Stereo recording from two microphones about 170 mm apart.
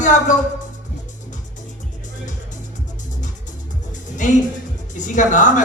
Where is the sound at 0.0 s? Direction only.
45° left (ahead or behind).